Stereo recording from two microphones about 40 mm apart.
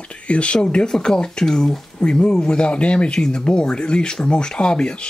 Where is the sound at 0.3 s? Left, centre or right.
Left.